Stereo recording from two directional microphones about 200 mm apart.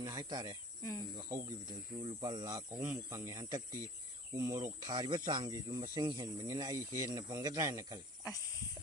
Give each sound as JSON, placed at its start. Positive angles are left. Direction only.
{"t": 0.0, "sound": "speech", "side_deg": -15}